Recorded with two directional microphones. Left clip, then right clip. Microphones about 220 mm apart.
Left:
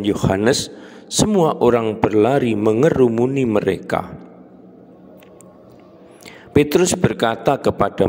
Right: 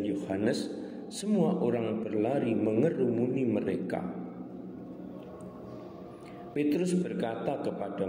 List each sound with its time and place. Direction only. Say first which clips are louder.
0.0 s speech: left 13 dB; 50° left (ahead or behind)
6.5 s speech: left 14 dB; 50° left (ahead or behind)